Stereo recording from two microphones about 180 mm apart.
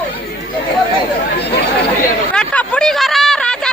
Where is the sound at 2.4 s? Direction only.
5° left (ahead or behind).